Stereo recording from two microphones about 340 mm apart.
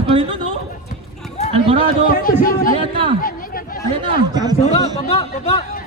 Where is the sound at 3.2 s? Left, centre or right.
Left.